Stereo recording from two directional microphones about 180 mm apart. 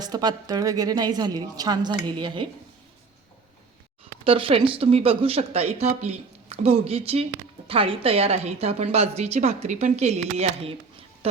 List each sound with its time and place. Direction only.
0.0 s a woman's voice: 20° right (ahead or behind)
4.2 s speech: 30° right (ahead or behind)